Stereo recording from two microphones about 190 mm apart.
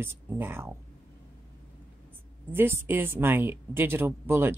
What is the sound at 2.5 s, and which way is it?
A woman's voice, 10° right (ahead or behind).